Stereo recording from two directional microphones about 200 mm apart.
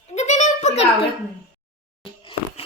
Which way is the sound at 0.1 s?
35° left (ahead or behind).